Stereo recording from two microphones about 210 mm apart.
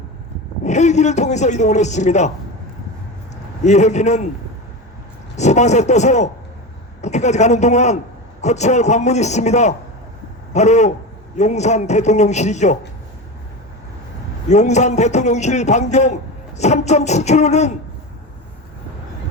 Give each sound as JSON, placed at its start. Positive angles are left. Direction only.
{"t": 0.6, "sound": "a man's voice", "side_deg": 35}
{"t": 3.6, "sound": "a man's voice", "side_deg": 35}
{"t": 5.4, "sound": "a man's voice", "side_deg": 35}
{"t": 14.5, "sound": "a man's voice", "side_deg": 35}